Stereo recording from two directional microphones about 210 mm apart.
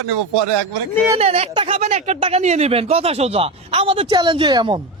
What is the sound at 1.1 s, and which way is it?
Speech, 30° right (ahead or behind).